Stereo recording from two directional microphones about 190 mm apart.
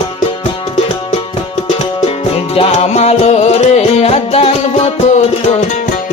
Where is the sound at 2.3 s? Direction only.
30° left (ahead or behind).